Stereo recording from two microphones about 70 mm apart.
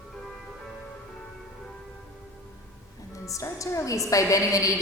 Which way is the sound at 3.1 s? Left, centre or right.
Left.